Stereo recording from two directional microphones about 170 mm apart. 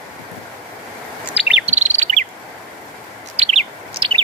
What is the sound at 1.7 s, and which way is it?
Chirp, 40° right (ahead or behind).